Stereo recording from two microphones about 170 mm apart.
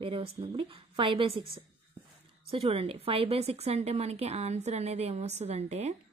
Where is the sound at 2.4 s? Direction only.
35° right (ahead or behind).